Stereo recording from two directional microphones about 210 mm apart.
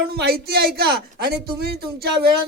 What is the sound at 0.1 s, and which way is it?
Speech, 50° right (ahead or behind).